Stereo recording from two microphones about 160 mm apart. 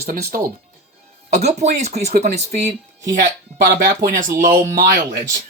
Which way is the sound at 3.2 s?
55° right (ahead or behind).